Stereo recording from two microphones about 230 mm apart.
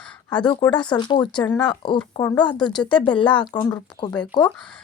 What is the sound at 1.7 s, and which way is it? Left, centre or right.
Speech, left.